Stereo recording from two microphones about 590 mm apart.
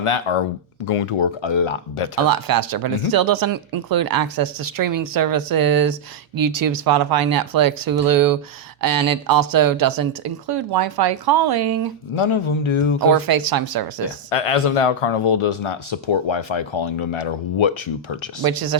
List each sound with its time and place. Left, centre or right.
0.0 s speech: left
2.2 s speech: right
12.1 s speech: left
13.1 s speech: right
14.3 s speech: left
18.4 s speech: right